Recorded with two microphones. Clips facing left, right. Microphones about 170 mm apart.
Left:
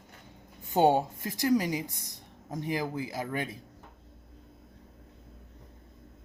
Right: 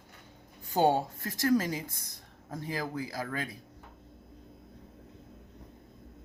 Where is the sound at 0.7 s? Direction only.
15° left (ahead or behind).